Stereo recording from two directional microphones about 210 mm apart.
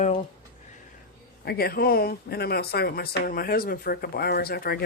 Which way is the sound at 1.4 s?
45° left (ahead or behind).